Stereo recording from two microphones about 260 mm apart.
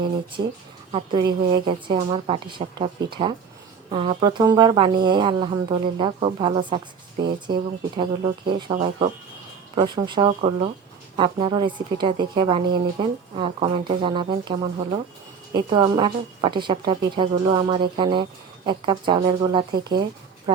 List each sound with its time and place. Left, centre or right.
0.9 s a woman's voice: centre